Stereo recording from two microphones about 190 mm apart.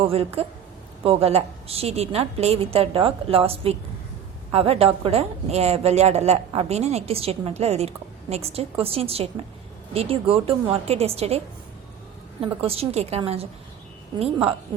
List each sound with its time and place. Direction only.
0.0 s a woman's voice: 30° right (ahead or behind)